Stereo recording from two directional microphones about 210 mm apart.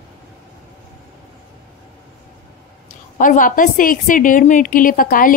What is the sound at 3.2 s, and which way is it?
A woman's voice, 40° left (ahead or behind).